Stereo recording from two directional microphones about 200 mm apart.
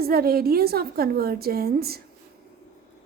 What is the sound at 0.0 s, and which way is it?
A woman's voice, 50° right (ahead or behind).